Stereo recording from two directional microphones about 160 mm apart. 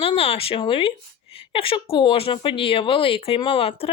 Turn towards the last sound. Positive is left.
turn(degrees=35)  # may be behind; listen again after turning